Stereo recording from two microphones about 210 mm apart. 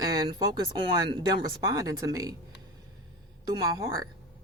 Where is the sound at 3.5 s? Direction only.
20° right (ahead or behind).